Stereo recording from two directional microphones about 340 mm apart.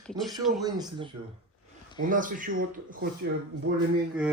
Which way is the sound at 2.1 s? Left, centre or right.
Right.